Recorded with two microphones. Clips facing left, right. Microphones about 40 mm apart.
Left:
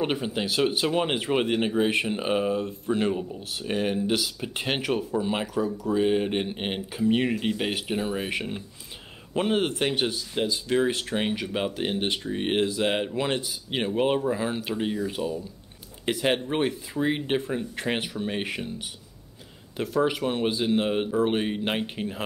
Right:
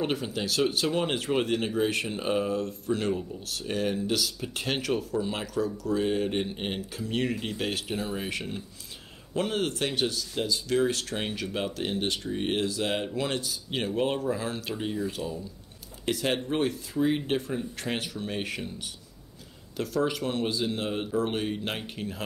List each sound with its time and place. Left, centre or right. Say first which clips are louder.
0.0 s speech: left 2 dB; left
19.8 s speech: left 3 dB; left